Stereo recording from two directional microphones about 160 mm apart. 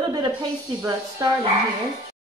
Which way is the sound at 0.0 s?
25° right (ahead or behind).